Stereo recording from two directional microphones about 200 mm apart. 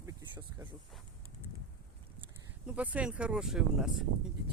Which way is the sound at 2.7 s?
5° right (ahead or behind).